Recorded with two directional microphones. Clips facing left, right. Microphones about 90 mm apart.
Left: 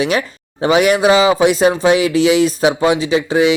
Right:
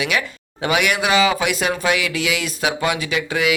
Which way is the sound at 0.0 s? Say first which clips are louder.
Left 5 dB; 35° left (ahead or behind).